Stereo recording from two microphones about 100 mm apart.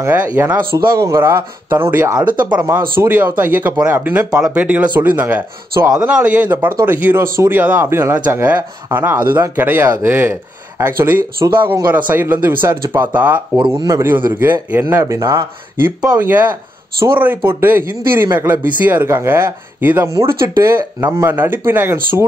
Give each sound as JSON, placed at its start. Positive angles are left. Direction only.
{"t": 0.0, "sound": "speech", "side_deg": -20}
{"t": 17.0, "sound": "speech", "side_deg": -20}